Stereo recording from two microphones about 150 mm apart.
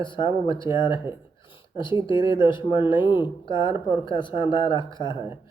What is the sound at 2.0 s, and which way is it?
Speech, 30° left (ahead or behind).